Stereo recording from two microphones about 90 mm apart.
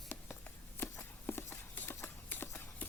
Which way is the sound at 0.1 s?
20° left (ahead or behind).